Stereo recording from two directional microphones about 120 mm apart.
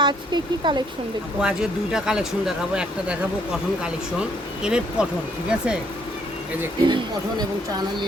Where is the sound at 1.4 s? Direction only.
5° right (ahead or behind).